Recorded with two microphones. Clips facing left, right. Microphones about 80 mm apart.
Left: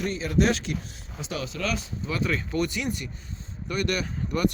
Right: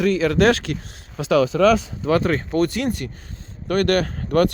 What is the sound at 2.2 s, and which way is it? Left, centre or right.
Speech, right.